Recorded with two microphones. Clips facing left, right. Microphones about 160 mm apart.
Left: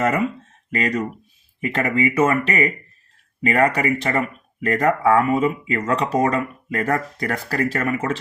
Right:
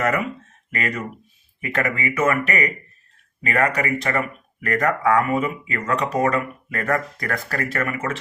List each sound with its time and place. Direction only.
0.7 s speech: 35° left (ahead or behind)